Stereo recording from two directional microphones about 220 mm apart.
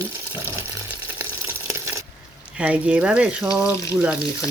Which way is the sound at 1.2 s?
10° right (ahead or behind).